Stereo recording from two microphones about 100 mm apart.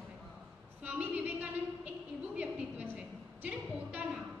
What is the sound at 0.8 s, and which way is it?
A woman's voice, 15° right (ahead or behind).